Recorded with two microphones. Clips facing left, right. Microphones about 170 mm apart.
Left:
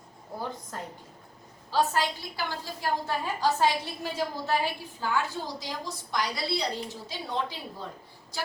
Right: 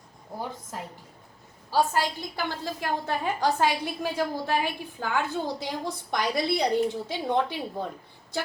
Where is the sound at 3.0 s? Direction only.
60° right (ahead or behind).